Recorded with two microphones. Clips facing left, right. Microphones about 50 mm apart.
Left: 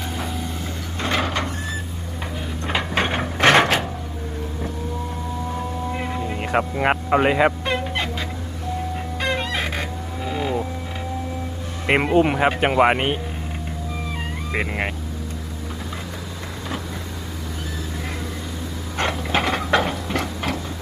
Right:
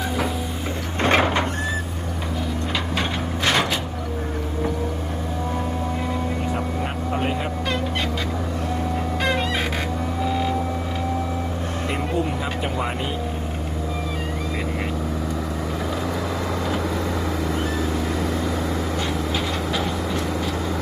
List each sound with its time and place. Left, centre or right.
1.2 s a sound: right
2.7 s a sound: left
6.5 s speech: left
9.2 s chicken: centre
11.9 s speech: left
18.9 s vehicle: left